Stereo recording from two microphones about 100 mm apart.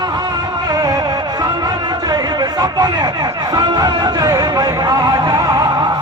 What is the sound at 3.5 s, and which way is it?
Speech, 40° right (ahead or behind).